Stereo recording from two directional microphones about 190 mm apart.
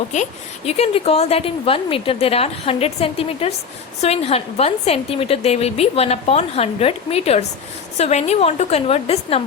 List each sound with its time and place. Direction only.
0.1 s a woman's voice: 35° left (ahead or behind)